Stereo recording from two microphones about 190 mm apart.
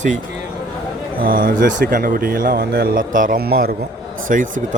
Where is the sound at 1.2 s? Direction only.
50° right (ahead or behind).